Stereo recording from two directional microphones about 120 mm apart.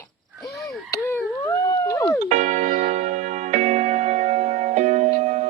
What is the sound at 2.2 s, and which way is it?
Music, 80° right.